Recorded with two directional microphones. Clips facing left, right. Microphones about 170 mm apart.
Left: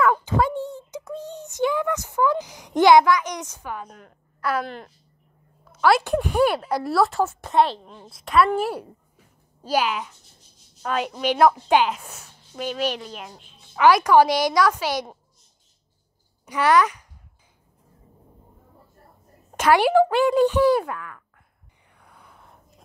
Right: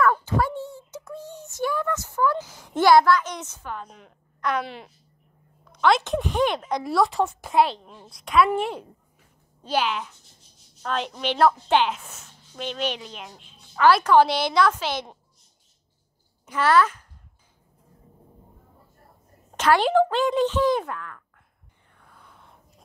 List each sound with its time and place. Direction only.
0.0 s a sound: 15° left (ahead or behind); by 4.9 s centre (ahead or behind)
5.7 s speech: 5° left (ahead or behind)
13.7 s speech: 15° left (ahead or behind)
16.4 s speech: 15° left (ahead or behind)
19.5 s speech: 10° left (ahead or behind)
21.9 s a sound: 15° left (ahead or behind)